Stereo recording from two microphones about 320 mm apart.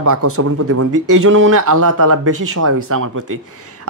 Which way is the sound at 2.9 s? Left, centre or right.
Right.